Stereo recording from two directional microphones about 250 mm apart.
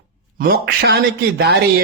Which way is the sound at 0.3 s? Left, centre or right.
Right.